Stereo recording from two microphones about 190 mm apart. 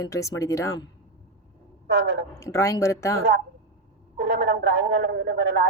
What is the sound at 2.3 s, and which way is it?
Speech, 15° left (ahead or behind).